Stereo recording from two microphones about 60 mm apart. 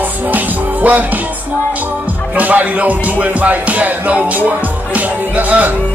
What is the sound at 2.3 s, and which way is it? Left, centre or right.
Music, right.